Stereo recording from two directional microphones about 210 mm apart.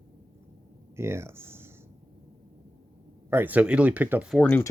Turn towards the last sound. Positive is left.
turn(degrees=10)  # may be behind; listen again after turning